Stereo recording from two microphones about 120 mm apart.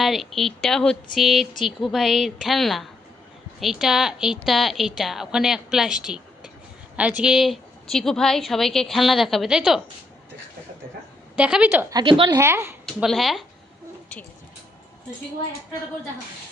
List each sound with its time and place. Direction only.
0.0 s a woman's voice: centre (ahead or behind)
11.3 s a woman's voice: 10° right (ahead or behind)
11.9 s a woman's voice: 35° right (ahead or behind)
12.1 s speech: 45° right (ahead or behind)
12.4 s speech: 20° right (ahead or behind)
12.8 s speech: centre (ahead or behind)